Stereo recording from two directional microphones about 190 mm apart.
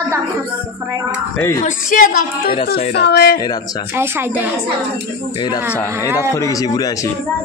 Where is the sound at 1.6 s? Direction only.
50° left (ahead or behind).